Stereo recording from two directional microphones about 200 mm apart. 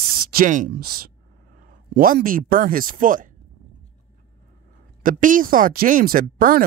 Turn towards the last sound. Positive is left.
turn(degrees=-45)  # may be behind; listen again after turning